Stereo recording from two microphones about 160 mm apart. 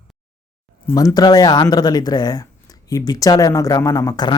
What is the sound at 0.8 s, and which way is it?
Speech, 20° left (ahead or behind).